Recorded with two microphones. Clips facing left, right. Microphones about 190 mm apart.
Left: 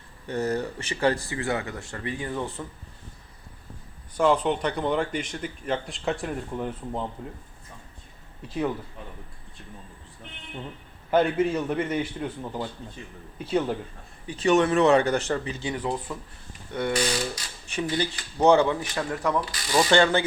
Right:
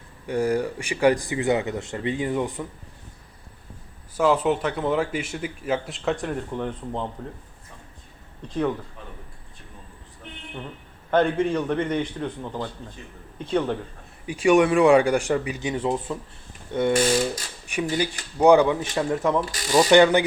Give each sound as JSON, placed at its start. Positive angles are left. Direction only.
{"t": 0.3, "sound": "speech", "side_deg": -10}
{"t": 4.2, "sound": "speech", "side_deg": -5}
{"t": 8.4, "sound": "a man's voice", "side_deg": 5}
{"t": 11.1, "sound": "a man's voice", "side_deg": 5}
{"t": 14.3, "sound": "speech", "side_deg": -10}
{"t": 16.9, "sound": "ratchet", "side_deg": -50}
{"t": 17.9, "sound": "speech", "side_deg": -10}